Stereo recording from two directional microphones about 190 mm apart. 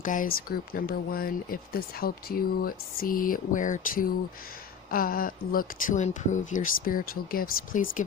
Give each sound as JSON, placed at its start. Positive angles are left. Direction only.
{"t": 0.0, "sound": "speech", "side_deg": 45}